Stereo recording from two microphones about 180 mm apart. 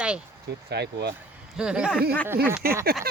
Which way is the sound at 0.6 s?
65° right (ahead or behind).